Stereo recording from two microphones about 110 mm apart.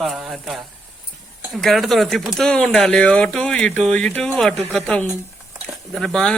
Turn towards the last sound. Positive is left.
turn(degrees=5)  # may be behind; listen again after turning